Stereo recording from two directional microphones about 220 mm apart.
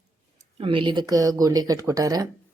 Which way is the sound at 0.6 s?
25° right (ahead or behind).